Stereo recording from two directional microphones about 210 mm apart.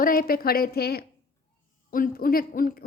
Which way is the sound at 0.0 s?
45° left (ahead or behind).